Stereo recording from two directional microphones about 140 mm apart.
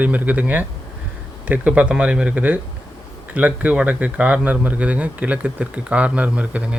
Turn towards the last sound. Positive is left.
turn(degrees=-10)  # may be behind; listen again after turning